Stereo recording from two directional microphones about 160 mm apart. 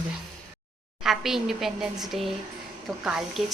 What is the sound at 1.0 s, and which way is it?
A woman's voice, centre (ahead or behind).